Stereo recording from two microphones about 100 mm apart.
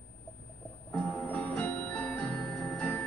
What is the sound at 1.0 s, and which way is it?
Music, 20° left (ahead or behind).